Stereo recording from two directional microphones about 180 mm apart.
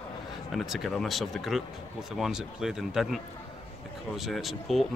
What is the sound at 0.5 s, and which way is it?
Speech, centre (ahead or behind).